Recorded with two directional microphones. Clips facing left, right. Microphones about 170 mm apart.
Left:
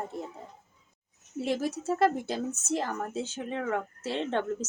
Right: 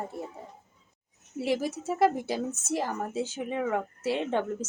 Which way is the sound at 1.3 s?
10° right (ahead or behind).